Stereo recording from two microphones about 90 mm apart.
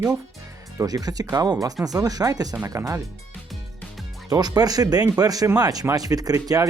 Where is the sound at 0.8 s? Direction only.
45° right (ahead or behind).